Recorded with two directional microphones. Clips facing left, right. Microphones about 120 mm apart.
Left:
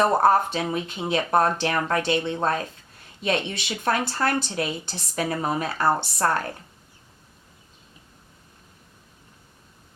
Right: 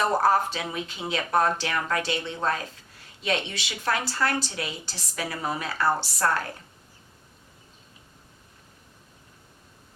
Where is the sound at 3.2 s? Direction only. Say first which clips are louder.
Left 3 dB; 50° left (ahead or behind).